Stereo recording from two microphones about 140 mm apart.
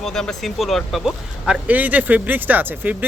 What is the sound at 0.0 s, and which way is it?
Speech, 5° left (ahead or behind).